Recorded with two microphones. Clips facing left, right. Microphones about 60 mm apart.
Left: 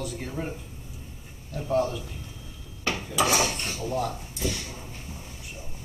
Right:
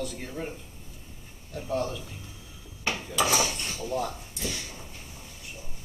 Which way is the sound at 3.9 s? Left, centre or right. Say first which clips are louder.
Even; centre.